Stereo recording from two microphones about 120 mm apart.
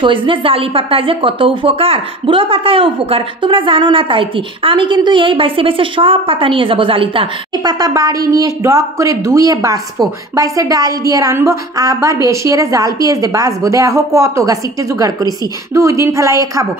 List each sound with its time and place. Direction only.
0.0 s a woman's voice: 45° right (ahead or behind)
7.6 s speech: 30° right (ahead or behind)